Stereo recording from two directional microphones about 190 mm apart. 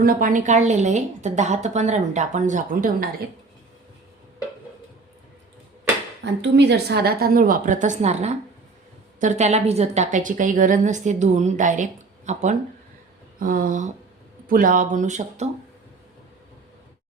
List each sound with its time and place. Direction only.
0.0 s a woman's voice: 50° right (ahead or behind)
6.4 s a woman's voice: 65° right (ahead or behind); by 15.4 s 40° right (ahead or behind)